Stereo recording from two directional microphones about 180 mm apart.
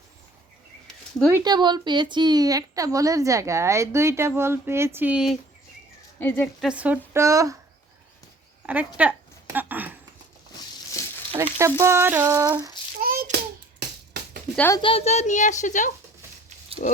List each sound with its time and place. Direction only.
1.3 s a woman's voice: 20° right (ahead or behind); by 5.4 s 5° right (ahead or behind)
6.1 s speech: 10° left (ahead or behind)
6.7 s a woman's voice: 5° right (ahead or behind)
8.6 s a sound: 10° right (ahead or behind)
11.3 s a woman's voice: 15° right (ahead or behind)
12.5 s child singing: 20° right (ahead or behind)
13.0 s hands: 55° right (ahead or behind)
14.5 s speech: 10° left (ahead or behind)
14.8 s a woman's voice: 30° left (ahead or behind)